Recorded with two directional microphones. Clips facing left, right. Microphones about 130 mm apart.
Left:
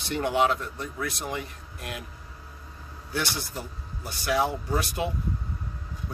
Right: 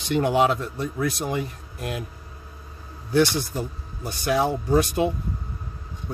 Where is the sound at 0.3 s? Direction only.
20° right (ahead or behind).